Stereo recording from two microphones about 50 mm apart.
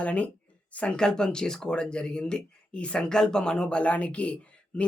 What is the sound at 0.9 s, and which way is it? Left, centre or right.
Speech, centre.